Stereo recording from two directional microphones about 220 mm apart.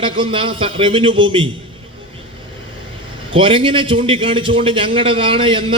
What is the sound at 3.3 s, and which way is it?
A man's voice, 25° right (ahead or behind).